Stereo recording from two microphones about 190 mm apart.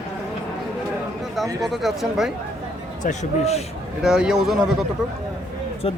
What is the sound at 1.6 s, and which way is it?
Speech, centre (ahead or behind).